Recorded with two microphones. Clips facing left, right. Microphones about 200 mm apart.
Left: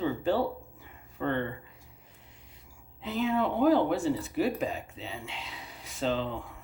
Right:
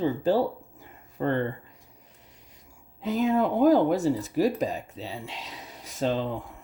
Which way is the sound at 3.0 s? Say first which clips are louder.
Right 5 dB; 40° right (ahead or behind).